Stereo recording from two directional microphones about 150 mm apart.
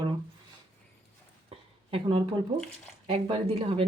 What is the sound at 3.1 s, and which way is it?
Speech, 40° right (ahead or behind).